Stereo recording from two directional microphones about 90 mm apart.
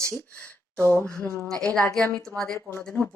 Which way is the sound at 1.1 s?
35° right (ahead or behind).